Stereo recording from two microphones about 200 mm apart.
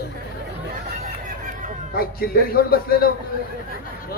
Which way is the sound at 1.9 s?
50° left (ahead or behind).